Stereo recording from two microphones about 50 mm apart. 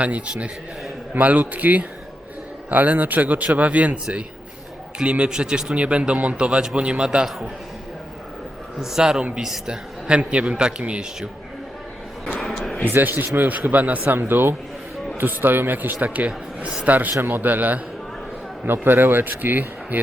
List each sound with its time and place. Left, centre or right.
0.0 s a man's voice: right
8.8 s a man's voice: centre
12.4 s a sound: centre
12.8 s a man's voice: right
14.2 s a man's voice: right